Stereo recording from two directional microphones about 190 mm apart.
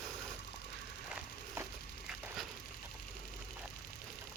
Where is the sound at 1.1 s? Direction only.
5° right (ahead or behind).